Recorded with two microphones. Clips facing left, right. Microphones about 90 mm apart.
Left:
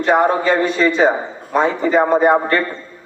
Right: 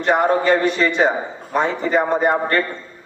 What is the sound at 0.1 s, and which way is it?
A man's voice, 15° left (ahead or behind).